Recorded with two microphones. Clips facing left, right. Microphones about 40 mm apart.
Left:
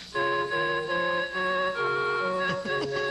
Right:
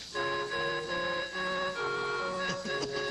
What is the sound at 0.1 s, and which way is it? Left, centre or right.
Organ, left.